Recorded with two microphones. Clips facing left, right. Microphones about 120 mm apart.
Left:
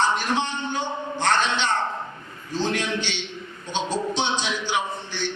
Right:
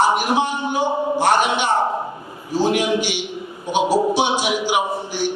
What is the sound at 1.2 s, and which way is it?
A man's voice, 15° right (ahead or behind).